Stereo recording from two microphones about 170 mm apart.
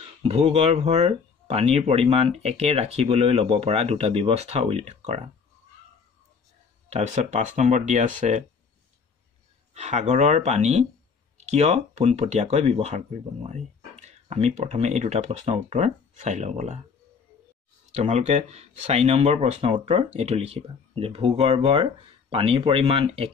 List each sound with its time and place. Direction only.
0.2 s speech: 35° right (ahead or behind)
6.9 s speech: 45° right (ahead or behind)
9.8 s speech: 40° right (ahead or behind)
18.0 s speech: 40° right (ahead or behind)